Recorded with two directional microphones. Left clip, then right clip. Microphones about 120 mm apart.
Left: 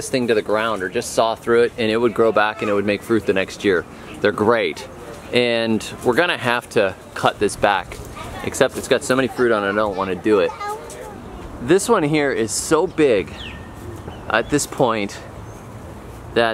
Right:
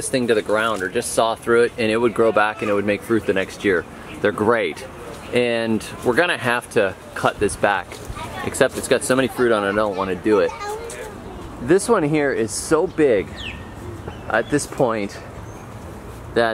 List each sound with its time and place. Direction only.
0.1 s speech: 10° left (ahead or behind)
11.6 s speech: 10° left (ahead or behind)
14.8 s speech: 20° left (ahead or behind)
16.4 s speech: 10° left (ahead or behind)